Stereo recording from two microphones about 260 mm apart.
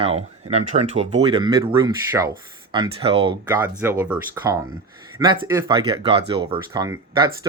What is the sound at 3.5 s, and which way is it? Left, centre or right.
Speech, centre.